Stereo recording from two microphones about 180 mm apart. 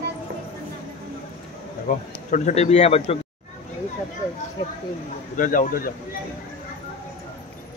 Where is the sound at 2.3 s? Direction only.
40° left (ahead or behind).